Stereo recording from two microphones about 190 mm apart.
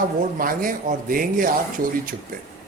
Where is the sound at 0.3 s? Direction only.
45° right (ahead or behind).